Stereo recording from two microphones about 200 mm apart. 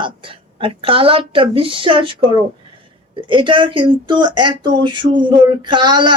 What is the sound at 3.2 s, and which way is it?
A woman's voice, 25° right (ahead or behind).